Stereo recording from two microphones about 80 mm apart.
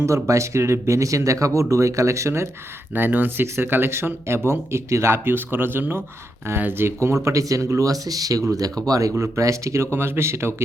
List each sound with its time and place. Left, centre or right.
0.0 s speech: right
2.9 s speech: right